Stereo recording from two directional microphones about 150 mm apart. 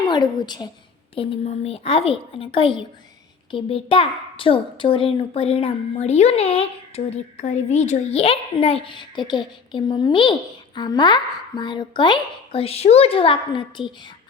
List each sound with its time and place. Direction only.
0.1 s a woman's voice: 30° left (ahead or behind)